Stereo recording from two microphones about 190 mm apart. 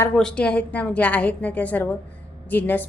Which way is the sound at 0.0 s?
5° left (ahead or behind).